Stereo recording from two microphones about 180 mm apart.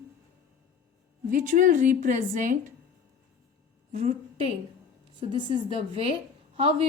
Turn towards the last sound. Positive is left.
turn(degrees=-35)  # may be behind; listen again after turning